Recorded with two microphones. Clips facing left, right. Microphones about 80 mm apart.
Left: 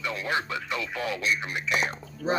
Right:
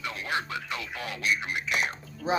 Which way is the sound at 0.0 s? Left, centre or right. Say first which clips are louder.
Left 3 dB; left.